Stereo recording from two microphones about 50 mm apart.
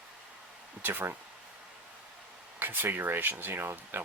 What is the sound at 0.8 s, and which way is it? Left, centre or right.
Speech, right.